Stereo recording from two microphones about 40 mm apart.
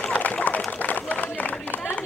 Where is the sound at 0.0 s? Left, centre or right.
Left.